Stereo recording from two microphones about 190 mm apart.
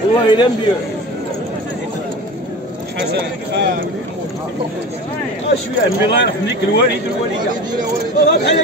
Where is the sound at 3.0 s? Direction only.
60° right (ahead or behind).